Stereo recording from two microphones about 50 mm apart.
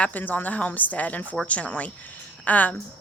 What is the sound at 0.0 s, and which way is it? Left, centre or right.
A woman's voice, left.